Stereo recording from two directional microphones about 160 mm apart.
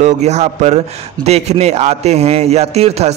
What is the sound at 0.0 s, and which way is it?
A man's voice, 45° right (ahead or behind).